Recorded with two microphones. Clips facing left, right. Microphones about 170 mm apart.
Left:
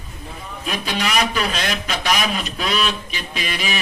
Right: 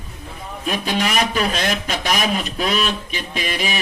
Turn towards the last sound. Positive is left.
turn(degrees=-45)  # may be behind; listen again after turning